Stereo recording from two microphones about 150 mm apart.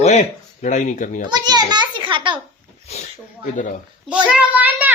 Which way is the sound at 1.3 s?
30° right (ahead or behind).